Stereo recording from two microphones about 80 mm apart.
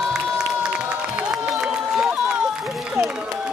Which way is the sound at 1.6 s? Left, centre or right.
Centre.